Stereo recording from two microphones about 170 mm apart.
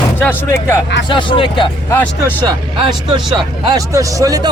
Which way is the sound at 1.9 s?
10° left (ahead or behind).